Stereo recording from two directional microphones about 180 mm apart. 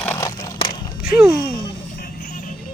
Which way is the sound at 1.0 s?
5° right (ahead or behind).